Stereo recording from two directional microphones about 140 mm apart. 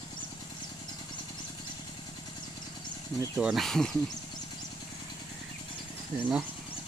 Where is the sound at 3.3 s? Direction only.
Centre (ahead or behind).